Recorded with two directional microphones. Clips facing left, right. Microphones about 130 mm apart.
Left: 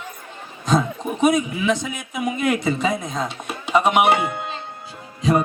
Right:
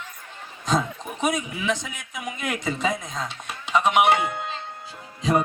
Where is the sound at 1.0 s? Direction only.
55° left (ahead or behind).